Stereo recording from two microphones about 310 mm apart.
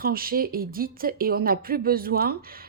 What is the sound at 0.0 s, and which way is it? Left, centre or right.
Speech, right.